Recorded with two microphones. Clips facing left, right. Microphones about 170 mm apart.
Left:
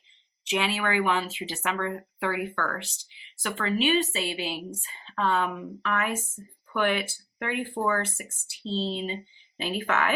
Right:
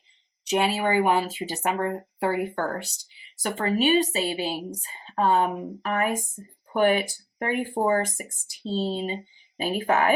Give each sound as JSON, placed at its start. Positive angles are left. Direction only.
{"t": 0.5, "sound": "speech", "side_deg": -40}
{"t": 3.6, "sound": "speech", "side_deg": -45}
{"t": 8.6, "sound": "speech", "side_deg": -10}
{"t": 8.9, "sound": "speech", "side_deg": -40}